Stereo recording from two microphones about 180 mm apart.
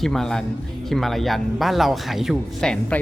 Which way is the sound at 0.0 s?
Centre (ahead or behind).